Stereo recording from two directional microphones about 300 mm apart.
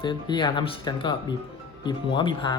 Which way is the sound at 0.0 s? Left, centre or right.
Centre.